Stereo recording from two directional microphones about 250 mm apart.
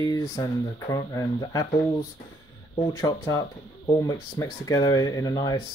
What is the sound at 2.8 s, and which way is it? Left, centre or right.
Speech, centre.